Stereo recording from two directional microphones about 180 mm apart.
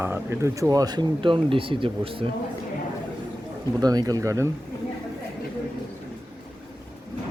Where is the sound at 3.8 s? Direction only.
20° right (ahead or behind).